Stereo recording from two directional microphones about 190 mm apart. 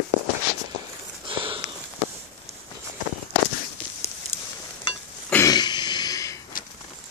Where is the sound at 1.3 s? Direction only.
25° right (ahead or behind).